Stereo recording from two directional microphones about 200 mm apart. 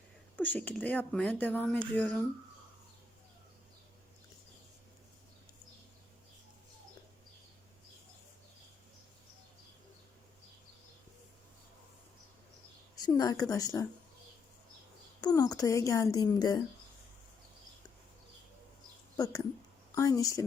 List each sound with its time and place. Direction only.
0.3 s speech: 10° left (ahead or behind)
13.1 s speech: 15° left (ahead or behind)
15.2 s speech: 20° left (ahead or behind)
19.1 s speech: 20° left (ahead or behind)